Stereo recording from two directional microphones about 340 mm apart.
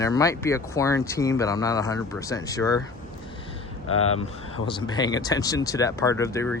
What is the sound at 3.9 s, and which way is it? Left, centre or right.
Speech, left.